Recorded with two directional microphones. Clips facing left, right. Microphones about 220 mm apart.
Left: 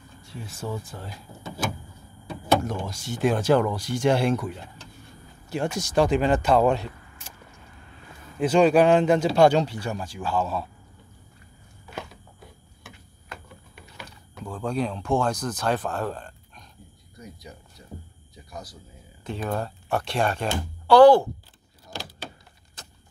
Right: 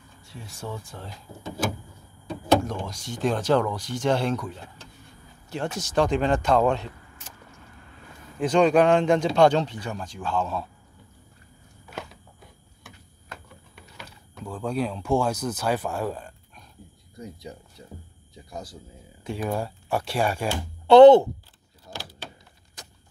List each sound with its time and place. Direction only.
0.2 s speech: centre (ahead or behind)
2.6 s speech: 5° left (ahead or behind)
8.4 s speech: 5° left (ahead or behind)
14.0 s speech: 5° right (ahead or behind)
17.2 s speech: 25° right (ahead or behind)
19.2 s speech: 10° right (ahead or behind)
20.8 s speech: 25° right (ahead or behind)
22.8 s a sound: 15° right (ahead or behind)